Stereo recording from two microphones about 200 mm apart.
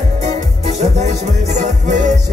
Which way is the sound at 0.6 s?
35° right (ahead or behind).